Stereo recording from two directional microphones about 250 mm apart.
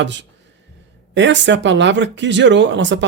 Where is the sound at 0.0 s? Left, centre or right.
Right.